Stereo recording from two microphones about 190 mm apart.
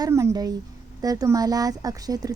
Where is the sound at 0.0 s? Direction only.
15° right (ahead or behind).